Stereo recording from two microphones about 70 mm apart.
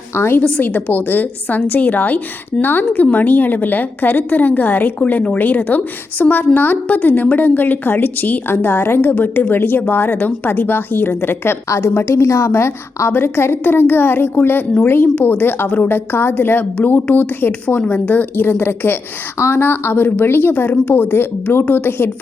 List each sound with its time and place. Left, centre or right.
0.1 s a woman's voice: left
0.4 s a woman's voice: left